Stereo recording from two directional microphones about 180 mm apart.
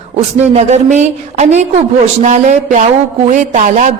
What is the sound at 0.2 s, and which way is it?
A woman's voice, 40° right (ahead or behind).